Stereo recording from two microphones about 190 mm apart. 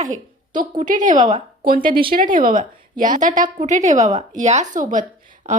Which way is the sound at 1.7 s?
50° right (ahead or behind).